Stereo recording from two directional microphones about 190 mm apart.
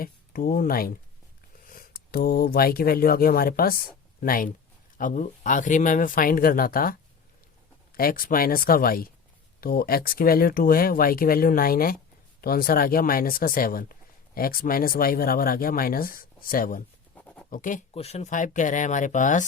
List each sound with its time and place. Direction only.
0.0 s speech: 50° left (ahead or behind)
7.9 s speech: 50° left (ahead or behind)
17.2 s scratch: 5° left (ahead or behind)
17.5 s speech: 45° left (ahead or behind)
17.9 s speech: 35° left (ahead or behind)